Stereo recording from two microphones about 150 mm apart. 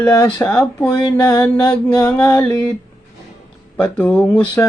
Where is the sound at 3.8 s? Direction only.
10° left (ahead or behind).